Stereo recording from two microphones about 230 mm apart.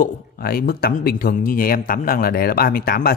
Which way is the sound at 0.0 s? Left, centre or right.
Left.